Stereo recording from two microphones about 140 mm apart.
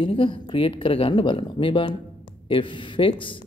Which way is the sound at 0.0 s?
40° left (ahead or behind).